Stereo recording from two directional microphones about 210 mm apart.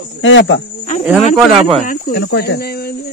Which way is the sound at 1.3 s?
Centre (ahead or behind).